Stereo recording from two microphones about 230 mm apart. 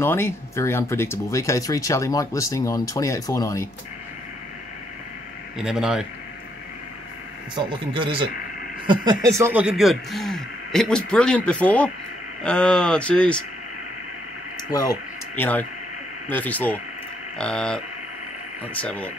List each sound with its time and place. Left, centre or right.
0.0 s speech: centre
5.6 s speech: centre
7.5 s speech: right
9.0 s speech: centre
14.7 s speech: centre